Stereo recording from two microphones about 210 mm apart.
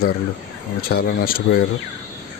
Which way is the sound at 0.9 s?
45° left (ahead or behind).